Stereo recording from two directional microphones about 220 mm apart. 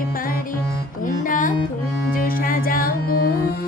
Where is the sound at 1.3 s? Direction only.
35° left (ahead or behind).